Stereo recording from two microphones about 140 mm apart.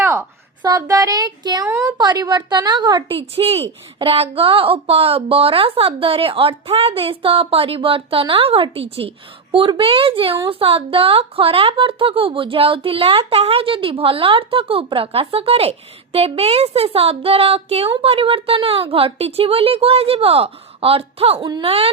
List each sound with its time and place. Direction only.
0.0 s a woman's voice: 20° right (ahead or behind)
3.3 s speech: 45° right (ahead or behind)